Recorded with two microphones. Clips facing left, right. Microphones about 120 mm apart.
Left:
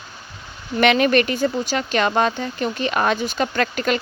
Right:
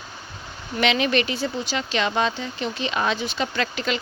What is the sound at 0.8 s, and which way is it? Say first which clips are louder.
Speech: left 5 dB; 50° left (ahead or behind).